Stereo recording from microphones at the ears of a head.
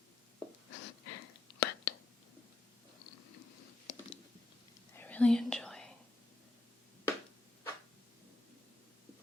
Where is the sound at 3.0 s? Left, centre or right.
Left.